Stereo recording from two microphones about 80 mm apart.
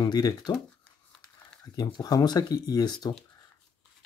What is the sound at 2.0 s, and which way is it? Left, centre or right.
Speech, left.